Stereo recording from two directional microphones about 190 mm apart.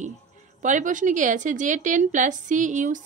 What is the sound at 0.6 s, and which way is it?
A woman's voice, 40° right (ahead or behind).